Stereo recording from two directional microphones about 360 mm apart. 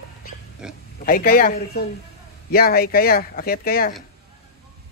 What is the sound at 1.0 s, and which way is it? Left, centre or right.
Speech, left.